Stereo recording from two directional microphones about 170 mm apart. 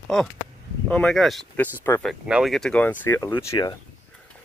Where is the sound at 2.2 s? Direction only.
5° right (ahead or behind).